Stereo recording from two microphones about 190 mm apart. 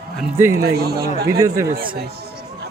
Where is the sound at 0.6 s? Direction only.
55° right (ahead or behind).